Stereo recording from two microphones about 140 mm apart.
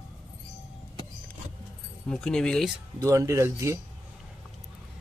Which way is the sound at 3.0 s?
20° right (ahead or behind).